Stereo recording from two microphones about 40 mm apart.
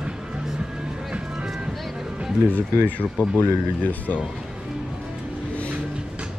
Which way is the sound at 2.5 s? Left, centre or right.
Left.